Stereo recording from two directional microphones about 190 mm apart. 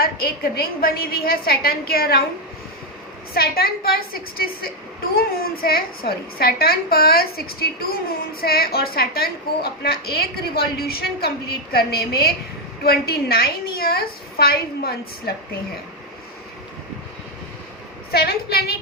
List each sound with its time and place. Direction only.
0.0 s a woman's voice: 50° left (ahead or behind)
3.3 s a woman's voice: 50° left (ahead or behind)
18.1 s a woman's voice: 55° left (ahead or behind)